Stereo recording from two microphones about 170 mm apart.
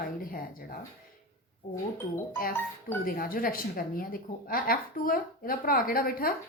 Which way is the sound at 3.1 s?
60° left (ahead or behind).